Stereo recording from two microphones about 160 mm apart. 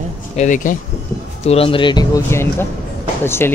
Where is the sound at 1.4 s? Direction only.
35° left (ahead or behind); by 3.5 s 15° left (ahead or behind).